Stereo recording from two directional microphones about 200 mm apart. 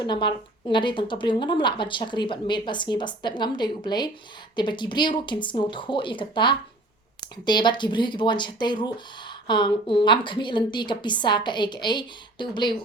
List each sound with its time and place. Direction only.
0.0 s speech: 25° left (ahead or behind)